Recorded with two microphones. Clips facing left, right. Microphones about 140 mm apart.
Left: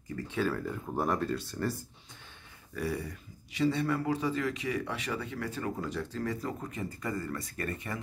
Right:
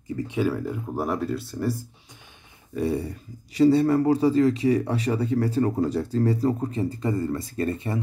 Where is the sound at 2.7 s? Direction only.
25° right (ahead or behind).